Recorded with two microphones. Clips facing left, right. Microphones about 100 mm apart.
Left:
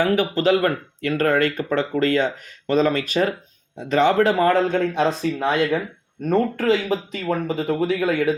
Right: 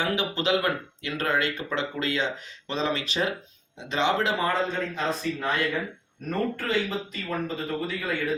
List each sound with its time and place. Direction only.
0.0 s speech: 45° left (ahead or behind); by 8.4 s 90° left